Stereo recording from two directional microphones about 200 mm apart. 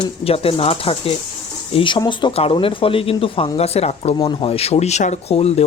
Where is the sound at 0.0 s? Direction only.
30° left (ahead or behind).